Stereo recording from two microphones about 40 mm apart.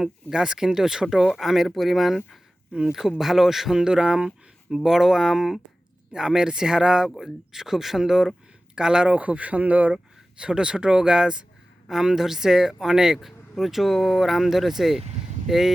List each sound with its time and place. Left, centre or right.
0.0 s speech: centre
2.7 s speech: right
3.2 s speech: centre
3.8 s speech: centre
4.7 s speech: centre
6.1 s speech: centre
7.2 s speech: centre
9.0 s speech: right
9.9 s speech: right
12.1 s speech: centre